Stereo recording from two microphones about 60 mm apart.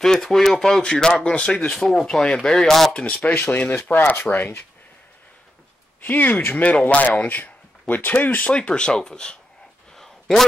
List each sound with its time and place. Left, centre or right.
0.0 s speech: centre
3.0 s speech: left
5.9 s speech: left
8.5 s speech: centre
9.9 s a sound: centre